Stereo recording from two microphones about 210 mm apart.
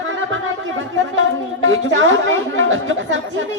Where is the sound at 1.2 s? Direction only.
65° right (ahead or behind).